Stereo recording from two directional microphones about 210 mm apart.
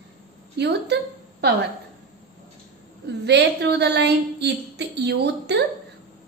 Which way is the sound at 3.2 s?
55° right (ahead or behind).